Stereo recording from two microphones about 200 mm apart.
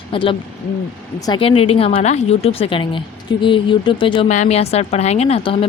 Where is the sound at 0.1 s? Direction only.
25° left (ahead or behind).